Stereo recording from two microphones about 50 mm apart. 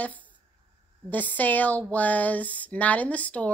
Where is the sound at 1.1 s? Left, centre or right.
Left.